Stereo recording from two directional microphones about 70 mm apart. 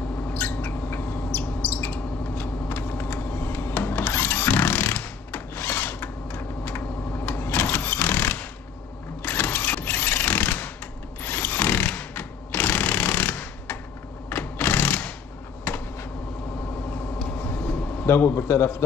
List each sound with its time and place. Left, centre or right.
0.3 s bird: left
9.2 s sewing machine: left
11.2 s a sound: left
14.3 s sewing machine: left
15.7 s a sound: left
17.4 s vehicle: left
18.0 s a man's voice: left